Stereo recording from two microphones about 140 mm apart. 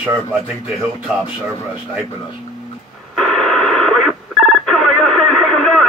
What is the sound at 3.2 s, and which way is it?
Radio, 5° left (ahead or behind).